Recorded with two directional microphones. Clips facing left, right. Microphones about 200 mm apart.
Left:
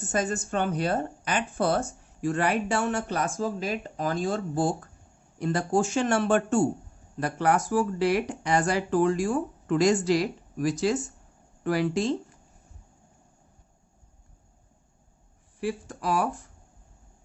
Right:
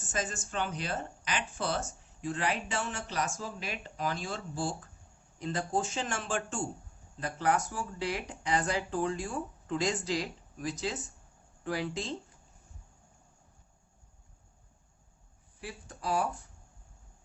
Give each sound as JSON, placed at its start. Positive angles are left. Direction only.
{"t": 0.0, "sound": "speech", "side_deg": 60}
{"t": 5.4, "sound": "speech", "side_deg": 70}
{"t": 15.6, "sound": "speech", "side_deg": 85}